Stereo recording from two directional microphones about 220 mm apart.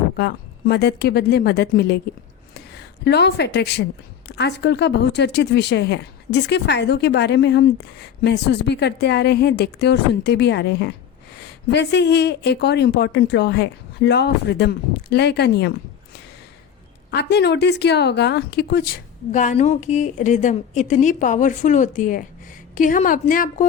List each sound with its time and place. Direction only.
0.2 s a woman's voice: 45° left (ahead or behind)
17.1 s speech: 50° left (ahead or behind)